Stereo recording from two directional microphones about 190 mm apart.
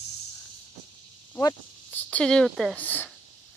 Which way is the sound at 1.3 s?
10° left (ahead or behind).